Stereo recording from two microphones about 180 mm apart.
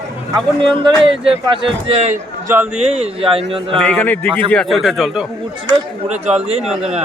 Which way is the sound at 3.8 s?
10° left (ahead or behind).